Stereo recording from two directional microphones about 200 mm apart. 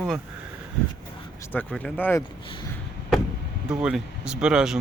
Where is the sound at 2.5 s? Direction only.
25° left (ahead or behind).